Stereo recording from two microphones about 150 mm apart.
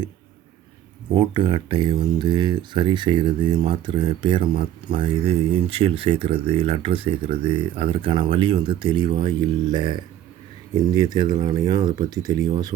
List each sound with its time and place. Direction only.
1.1 s speech: 35° right (ahead or behind)